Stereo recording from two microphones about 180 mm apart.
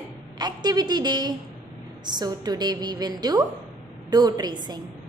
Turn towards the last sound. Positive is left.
turn(degrees=-20)  # may be behind; listen again after turning